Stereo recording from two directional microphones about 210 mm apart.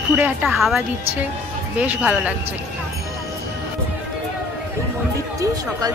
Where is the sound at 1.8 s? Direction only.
5° right (ahead or behind).